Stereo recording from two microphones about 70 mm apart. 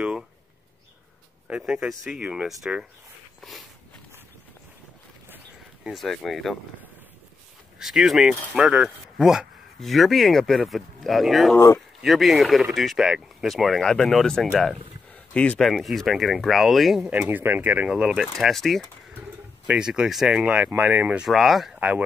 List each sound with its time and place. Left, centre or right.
1.5 s speech: centre
3.3 s walk: centre
5.9 s speech: centre
7.8 s speech: centre
13.7 s speech: centre
15.1 s a sound: centre
15.6 s speech: centre
17.1 s speech: right
17.8 s speech: centre
19.6 s speech: centre
20.6 s speech: right
21.2 s speech: centre
21.7 s speech: right